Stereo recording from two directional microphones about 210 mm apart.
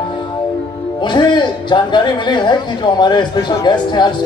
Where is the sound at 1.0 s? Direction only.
20° left (ahead or behind).